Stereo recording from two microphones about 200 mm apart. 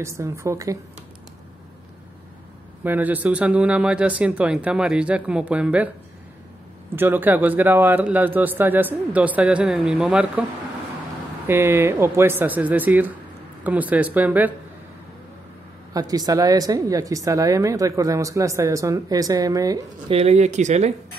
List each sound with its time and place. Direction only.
0.0 s speech: 15° right (ahead or behind)
2.8 s speech: 10° right (ahead or behind)
7.0 s speech: 10° right (ahead or behind)
11.4 s speech: 10° right (ahead or behind)
15.9 s speech: 20° right (ahead or behind)
20.2 s speech: 35° right (ahead or behind)